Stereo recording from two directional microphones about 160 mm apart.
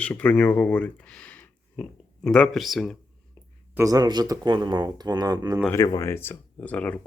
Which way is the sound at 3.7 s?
20° right (ahead or behind).